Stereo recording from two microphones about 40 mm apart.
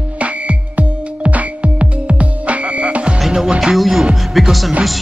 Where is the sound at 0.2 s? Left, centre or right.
Right.